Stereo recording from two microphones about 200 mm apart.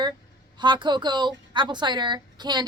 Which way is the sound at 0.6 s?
20° right (ahead or behind).